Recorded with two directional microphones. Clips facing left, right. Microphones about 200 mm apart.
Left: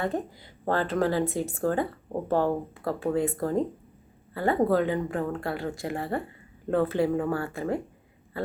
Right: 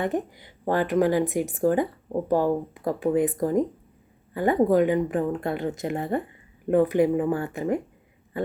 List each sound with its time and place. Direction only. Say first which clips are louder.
0.0 s a woman's voice: right 3 dB; 20° right (ahead or behind)